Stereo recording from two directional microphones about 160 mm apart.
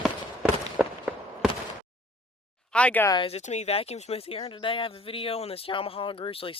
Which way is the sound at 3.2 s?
40° left (ahead or behind).